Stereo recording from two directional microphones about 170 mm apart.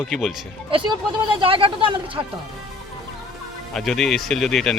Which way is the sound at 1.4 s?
30° right (ahead or behind).